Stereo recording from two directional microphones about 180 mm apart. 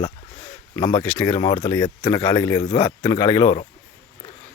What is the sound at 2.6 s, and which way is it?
Speech, 25° left (ahead or behind).